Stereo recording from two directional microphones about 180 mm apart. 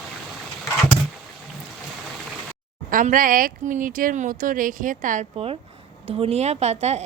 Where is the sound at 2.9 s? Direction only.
50° right (ahead or behind).